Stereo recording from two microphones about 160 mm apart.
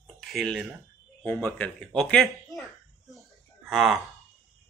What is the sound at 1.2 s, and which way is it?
Speech, 10° left (ahead or behind).